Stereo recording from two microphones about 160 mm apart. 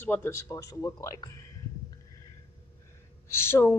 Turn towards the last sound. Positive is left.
turn(degrees=15)  # may be behind; listen again after turning